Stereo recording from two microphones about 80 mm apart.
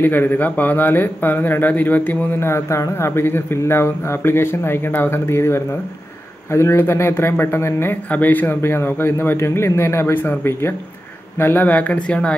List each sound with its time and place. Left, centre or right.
0.0 s a man's voice: left
11.3 s a man's voice: left